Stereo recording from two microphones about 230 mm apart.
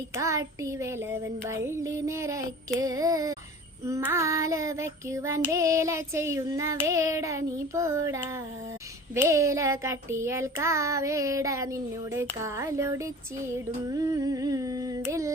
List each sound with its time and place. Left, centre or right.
0.2 s child singing: centre